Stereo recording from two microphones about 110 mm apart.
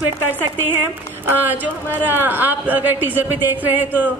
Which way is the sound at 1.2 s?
15° right (ahead or behind).